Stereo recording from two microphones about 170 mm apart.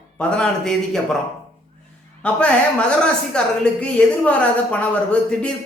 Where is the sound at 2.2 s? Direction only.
5° left (ahead or behind).